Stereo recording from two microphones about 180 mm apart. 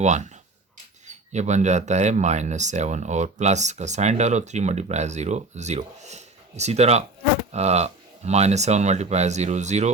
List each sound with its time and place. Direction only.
0.0 s speech: 40° right (ahead or behind)